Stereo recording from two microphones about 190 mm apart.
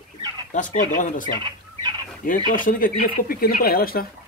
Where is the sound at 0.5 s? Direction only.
40° left (ahead or behind).